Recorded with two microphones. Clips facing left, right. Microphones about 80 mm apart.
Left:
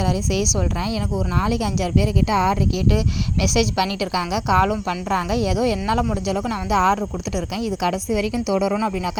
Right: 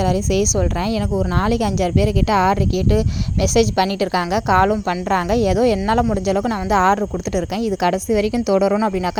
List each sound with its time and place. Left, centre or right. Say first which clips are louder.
0.0 s speech: right 4 dB; right
3.4 s speech: right 5 dB; right